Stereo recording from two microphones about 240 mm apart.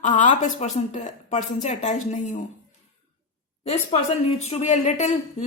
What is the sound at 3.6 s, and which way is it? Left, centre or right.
Speech, left.